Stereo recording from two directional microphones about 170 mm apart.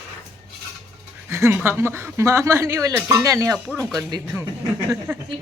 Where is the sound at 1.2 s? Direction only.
15° right (ahead or behind).